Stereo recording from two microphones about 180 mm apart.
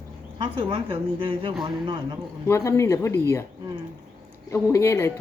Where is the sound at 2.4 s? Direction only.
15° left (ahead or behind).